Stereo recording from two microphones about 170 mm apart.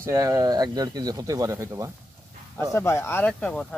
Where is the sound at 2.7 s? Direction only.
15° left (ahead or behind).